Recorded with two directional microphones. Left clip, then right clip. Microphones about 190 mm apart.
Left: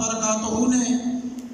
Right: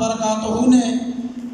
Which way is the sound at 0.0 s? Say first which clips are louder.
Right 4 dB; 25° right (ahead or behind).